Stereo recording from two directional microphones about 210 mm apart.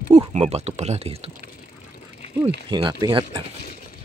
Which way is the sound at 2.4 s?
20° right (ahead or behind).